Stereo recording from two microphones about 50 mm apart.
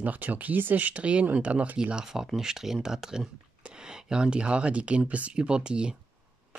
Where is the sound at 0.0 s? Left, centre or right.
Right.